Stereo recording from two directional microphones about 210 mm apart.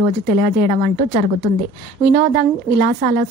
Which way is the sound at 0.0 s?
40° right (ahead or behind).